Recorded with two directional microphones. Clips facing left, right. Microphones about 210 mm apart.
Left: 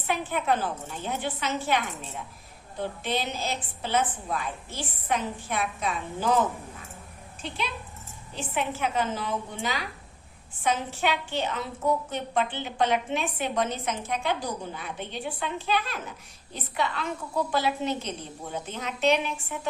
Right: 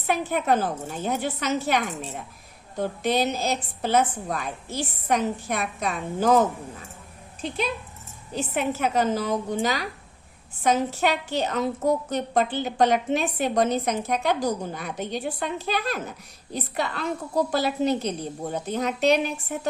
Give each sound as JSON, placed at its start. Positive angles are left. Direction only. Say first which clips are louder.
{"t": 0.1, "sound": "a woman's voice", "louder": "right 4 dB", "side_deg": -45}
{"t": 8.4, "sound": "a woman's voice", "louder": "right 4 dB", "side_deg": -40}